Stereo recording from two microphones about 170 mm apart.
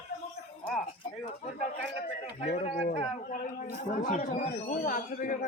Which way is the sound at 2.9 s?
50° left (ahead or behind).